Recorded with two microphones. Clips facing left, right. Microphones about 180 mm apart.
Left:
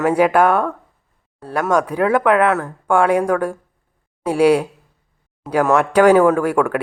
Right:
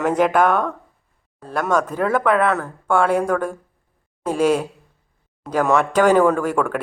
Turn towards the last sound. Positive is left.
turn(degrees=10)  # may be behind; listen again after turning